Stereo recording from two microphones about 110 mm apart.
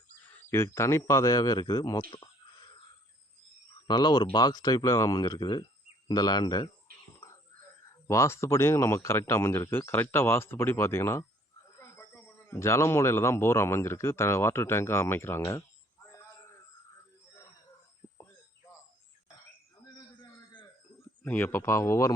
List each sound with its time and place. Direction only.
0.5 s speech: 25° left (ahead or behind)
3.8 s speech: 40° left (ahead or behind)
8.0 s speech: 25° left (ahead or behind)
18.0 s a sound: 50° left (ahead or behind)
21.2 s speech: 15° left (ahead or behind)